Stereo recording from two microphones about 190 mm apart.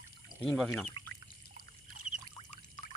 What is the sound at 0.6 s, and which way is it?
Speech, centre (ahead or behind).